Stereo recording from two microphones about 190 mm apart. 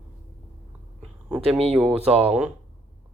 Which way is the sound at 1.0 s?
5° right (ahead or behind).